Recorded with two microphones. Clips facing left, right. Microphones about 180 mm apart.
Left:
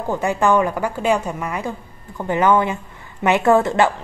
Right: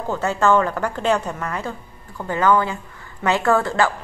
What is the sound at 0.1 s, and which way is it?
A woman's voice, 15° left (ahead or behind).